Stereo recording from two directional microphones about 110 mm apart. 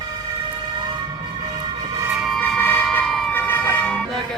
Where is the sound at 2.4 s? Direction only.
15° left (ahead or behind).